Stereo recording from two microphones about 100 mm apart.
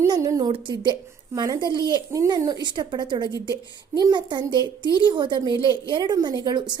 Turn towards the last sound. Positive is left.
turn(degrees=-50)  # may be behind; listen again after turning